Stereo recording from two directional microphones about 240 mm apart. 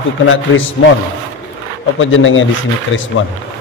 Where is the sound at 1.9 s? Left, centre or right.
Left.